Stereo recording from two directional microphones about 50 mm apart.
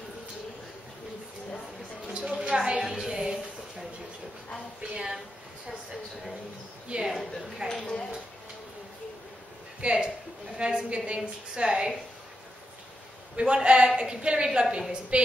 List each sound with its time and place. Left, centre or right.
2.1 s a sound: centre
2.8 s music: centre
4.8 s a sound: centre
6.9 s a woman's voice: right
7.6 s speech: centre
9.8 s a woman's voice: centre
13.4 s a woman's voice: centre